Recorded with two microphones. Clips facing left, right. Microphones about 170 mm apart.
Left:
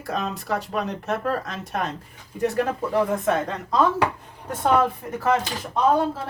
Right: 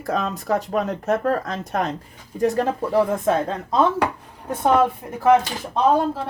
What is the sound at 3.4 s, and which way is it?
Speech, 25° right (ahead or behind).